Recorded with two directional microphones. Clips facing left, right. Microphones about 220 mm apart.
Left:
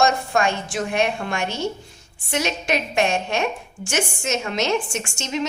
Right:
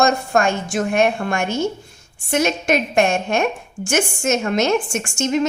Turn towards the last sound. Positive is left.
turn(degrees=-50)  # may be behind; listen again after turning